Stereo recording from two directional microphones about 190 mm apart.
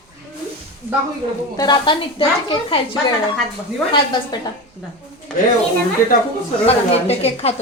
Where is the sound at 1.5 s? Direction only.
20° left (ahead or behind).